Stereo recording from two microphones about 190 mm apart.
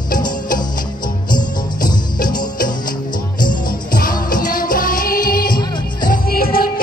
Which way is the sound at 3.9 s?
45° left (ahead or behind).